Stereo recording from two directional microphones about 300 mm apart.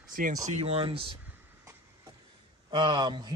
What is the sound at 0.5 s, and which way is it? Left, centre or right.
Speech, centre.